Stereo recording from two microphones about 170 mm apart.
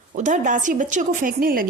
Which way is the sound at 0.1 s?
50° right (ahead or behind).